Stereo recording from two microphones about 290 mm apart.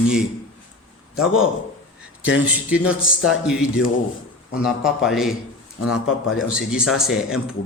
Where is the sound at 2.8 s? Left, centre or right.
Left.